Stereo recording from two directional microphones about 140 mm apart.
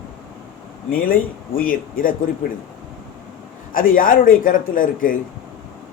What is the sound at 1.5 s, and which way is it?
Speech, 85° left.